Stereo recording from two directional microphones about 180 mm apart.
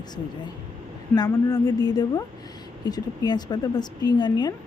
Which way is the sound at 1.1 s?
20° left (ahead or behind).